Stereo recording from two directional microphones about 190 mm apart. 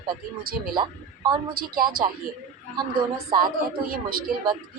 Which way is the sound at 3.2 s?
20° right (ahead or behind).